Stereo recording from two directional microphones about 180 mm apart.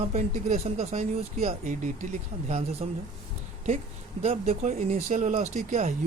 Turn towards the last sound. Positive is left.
turn(degrees=-45)  # may be behind; listen again after turning